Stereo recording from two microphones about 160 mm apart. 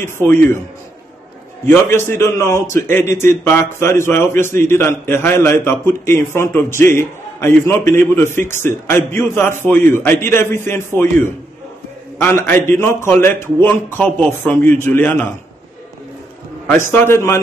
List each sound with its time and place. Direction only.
0.0 s a man's voice: 15° left (ahead or behind)
1.7 s a man's voice: 15° left (ahead or behind)
12.4 s a man's voice: 15° left (ahead or behind)
16.9 s a man's voice: 15° left (ahead or behind)